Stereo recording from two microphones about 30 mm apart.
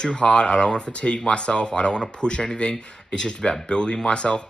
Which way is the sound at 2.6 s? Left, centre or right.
Left.